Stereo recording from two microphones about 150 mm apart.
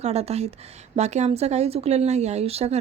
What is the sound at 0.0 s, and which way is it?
A woman's voice, 45° right (ahead or behind).